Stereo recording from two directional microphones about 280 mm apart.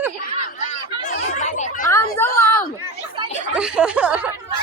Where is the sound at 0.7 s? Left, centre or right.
Left.